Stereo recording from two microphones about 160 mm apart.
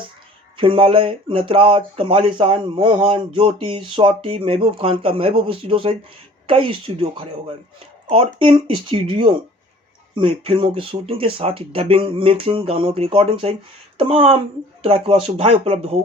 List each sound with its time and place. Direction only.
0.5 s speech: 35° right (ahead or behind)